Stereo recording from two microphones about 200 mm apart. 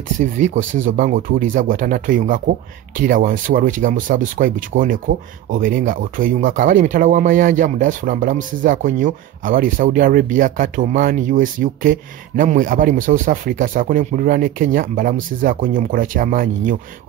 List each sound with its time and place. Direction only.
0.2 s speech: 40° right (ahead or behind)